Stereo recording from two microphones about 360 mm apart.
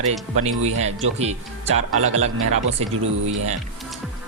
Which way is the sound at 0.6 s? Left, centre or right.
Right.